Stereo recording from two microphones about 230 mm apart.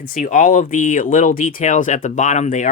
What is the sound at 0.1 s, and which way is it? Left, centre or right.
Speech, left.